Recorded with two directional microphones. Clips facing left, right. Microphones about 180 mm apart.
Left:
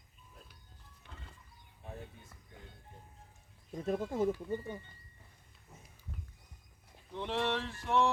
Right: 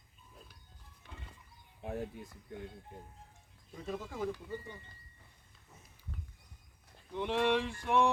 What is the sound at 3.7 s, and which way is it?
Speech, 50° left (ahead or behind).